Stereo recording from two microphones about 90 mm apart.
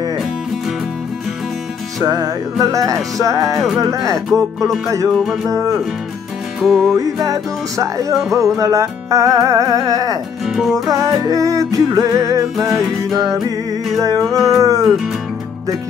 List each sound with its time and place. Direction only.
2.0 s music: 40° right (ahead or behind)
5.1 s speech: centre (ahead or behind)
5.5 s music: 35° right (ahead or behind)
6.6 s speech: centre (ahead or behind)
7.0 s music: 40° right (ahead or behind)
10.4 s speech: centre (ahead or behind)
11.0 s music: 40° right (ahead or behind)
13.9 s music: 40° right (ahead or behind)
14.2 s speech: centre (ahead or behind)
14.6 s music: 40° right (ahead or behind)